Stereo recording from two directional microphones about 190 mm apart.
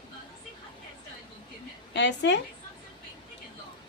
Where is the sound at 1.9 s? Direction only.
70° left (ahead or behind).